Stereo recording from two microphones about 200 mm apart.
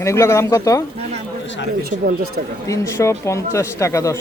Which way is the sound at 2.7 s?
15° left (ahead or behind).